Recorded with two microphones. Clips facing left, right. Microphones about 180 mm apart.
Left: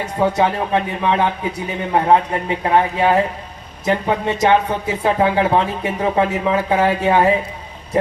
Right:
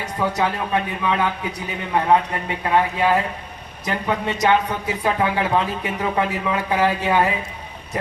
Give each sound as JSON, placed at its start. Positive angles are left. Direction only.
{"t": 0.0, "sound": "speech", "side_deg": 25}